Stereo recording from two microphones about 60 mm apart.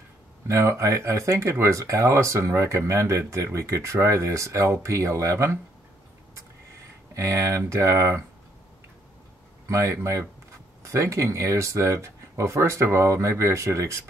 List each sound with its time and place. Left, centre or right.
0.5 s speech: right
7.2 s speech: right
9.7 s speech: right